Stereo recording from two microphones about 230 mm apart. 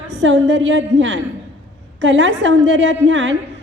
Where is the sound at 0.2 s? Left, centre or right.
Right.